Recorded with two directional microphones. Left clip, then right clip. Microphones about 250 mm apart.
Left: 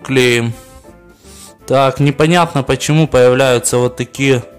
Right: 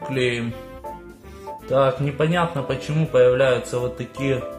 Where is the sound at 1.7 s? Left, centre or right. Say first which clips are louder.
Left 7 dB; left.